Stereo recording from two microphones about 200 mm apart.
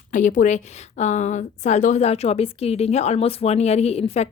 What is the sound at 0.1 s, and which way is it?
A woman's voice, 40° left (ahead or behind).